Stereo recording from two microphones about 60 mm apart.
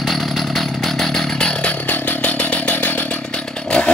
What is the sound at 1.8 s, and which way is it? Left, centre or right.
Chainsaw, left.